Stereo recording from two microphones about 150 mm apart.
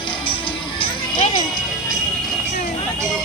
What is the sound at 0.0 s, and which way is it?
Music, 35° left (ahead or behind).